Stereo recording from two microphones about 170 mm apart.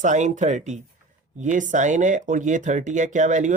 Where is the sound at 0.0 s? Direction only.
45° right (ahead or behind).